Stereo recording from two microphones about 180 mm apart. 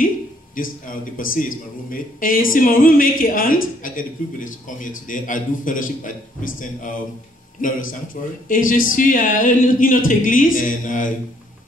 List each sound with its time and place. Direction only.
0.6 s speech: 50° left (ahead or behind)